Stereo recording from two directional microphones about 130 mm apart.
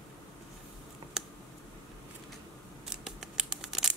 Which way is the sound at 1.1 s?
5° right (ahead or behind).